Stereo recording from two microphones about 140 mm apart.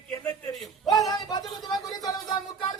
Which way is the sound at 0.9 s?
30° left (ahead or behind).